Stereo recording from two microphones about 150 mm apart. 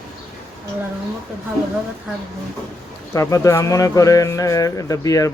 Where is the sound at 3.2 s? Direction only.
20° left (ahead or behind).